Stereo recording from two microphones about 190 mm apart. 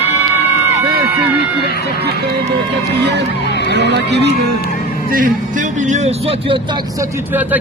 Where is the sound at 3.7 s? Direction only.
65° right (ahead or behind).